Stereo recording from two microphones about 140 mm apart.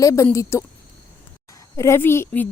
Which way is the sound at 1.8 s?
20° left (ahead or behind).